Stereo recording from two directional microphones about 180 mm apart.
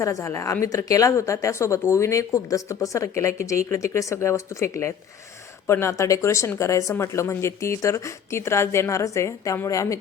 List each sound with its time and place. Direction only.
0.0 s speech: 15° left (ahead or behind)